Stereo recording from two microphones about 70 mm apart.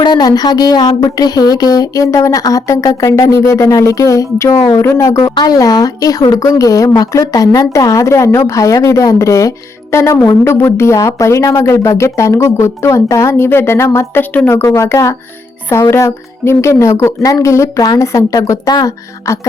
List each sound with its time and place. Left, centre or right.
0.0 s a woman's voice: left
5.2 s speech: left
5.5 s a woman's voice: left
13.4 s a woman's voice: left
17.7 s speech: left
18.0 s a woman's voice: left
18.7 s speech: left